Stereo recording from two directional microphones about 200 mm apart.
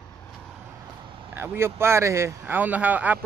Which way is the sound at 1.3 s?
10° right (ahead or behind).